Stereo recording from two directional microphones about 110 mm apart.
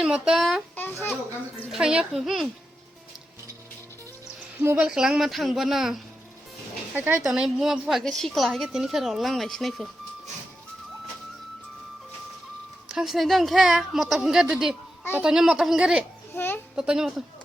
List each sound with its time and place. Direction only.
0.0 s a child's voice: 5° right (ahead or behind)
1.7 s a woman's voice: 5° right (ahead or behind)
4.5 s speech: 20° right (ahead or behind)
4.8 s a woman's voice: 5° right (ahead or behind)
6.9 s speech: 15° right (ahead or behind)
7.3 s a woman's voice: 5° right (ahead or behind)
12.9 s a woman's voice: 5° right (ahead or behind)
16.3 s a child's voice: 20° left (ahead or behind)
16.7 s a woman's voice: 5° right (ahead or behind)